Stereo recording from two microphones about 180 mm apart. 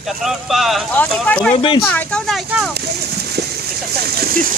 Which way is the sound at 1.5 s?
30° left (ahead or behind).